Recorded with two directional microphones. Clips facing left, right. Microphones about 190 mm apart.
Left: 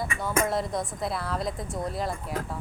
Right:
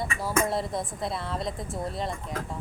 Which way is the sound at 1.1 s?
25° right (ahead or behind).